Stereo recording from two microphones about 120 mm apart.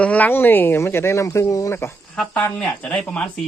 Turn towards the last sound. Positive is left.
turn(degrees=10)  # may be behind; listen again after turning